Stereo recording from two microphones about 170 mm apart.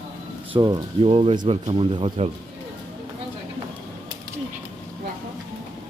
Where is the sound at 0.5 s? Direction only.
30° right (ahead or behind).